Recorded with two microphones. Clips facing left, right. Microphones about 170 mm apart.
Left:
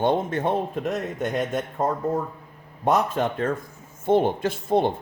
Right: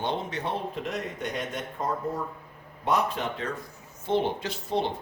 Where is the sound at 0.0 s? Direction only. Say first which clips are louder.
Left 8 dB; 50° left (ahead or behind).